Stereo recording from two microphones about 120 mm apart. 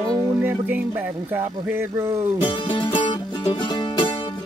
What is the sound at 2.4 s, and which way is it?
Music, 45° left (ahead or behind).